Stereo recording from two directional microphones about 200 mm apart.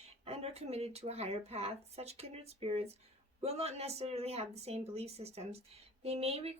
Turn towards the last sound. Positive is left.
turn(degrees=-30)  # may be behind; listen again after turning